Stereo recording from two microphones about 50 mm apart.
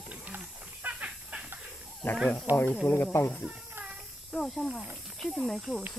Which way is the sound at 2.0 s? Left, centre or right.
Left.